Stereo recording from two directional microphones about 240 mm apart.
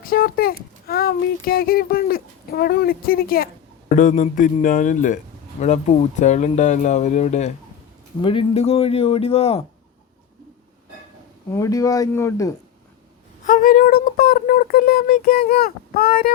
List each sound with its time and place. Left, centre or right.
0.0 s a man's voice: left
11.5 s speech: centre
13.4 s speech: left